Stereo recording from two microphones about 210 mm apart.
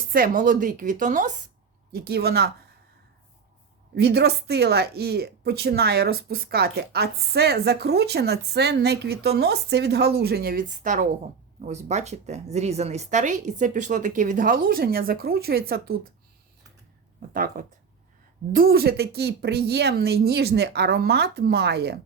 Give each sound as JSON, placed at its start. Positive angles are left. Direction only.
{"t": 0.1, "sound": "speech", "side_deg": -40}
{"t": 1.9, "sound": "speech", "side_deg": -50}
{"t": 3.9, "sound": "speech", "side_deg": -50}
{"t": 17.3, "sound": "speech", "side_deg": -45}